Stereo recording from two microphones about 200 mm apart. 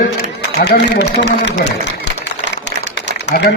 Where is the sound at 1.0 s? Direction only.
60° left (ahead or behind).